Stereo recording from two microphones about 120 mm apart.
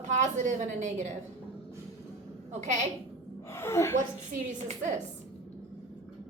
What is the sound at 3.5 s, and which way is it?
Speech, 20° left (ahead or behind).